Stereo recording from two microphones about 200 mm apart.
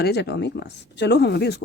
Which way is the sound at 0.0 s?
55° left (ahead or behind).